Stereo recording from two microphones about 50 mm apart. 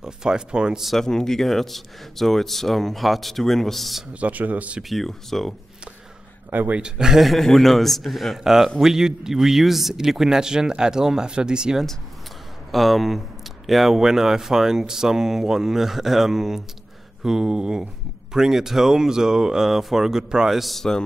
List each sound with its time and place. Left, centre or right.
0.0 s a man's voice: centre
0.8 s speech: centre
4.1 s speech: right
4.8 s speech: centre
6.7 s a man's voice: centre
7.2 s a man's voice: centre
12.7 s a man's voice: centre
20.7 s a man's voice: centre